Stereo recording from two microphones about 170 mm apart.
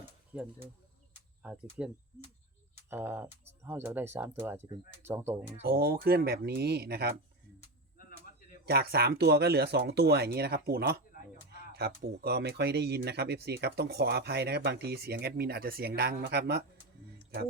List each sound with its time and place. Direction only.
0.3 s speech: 10° right (ahead or behind)
2.9 s speech: 10° right (ahead or behind)
5.6 s speech: 60° right (ahead or behind)
8.6 s speech: 65° right (ahead or behind)